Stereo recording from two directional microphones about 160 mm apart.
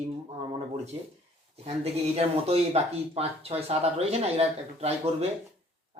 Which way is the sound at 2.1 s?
40° right (ahead or behind).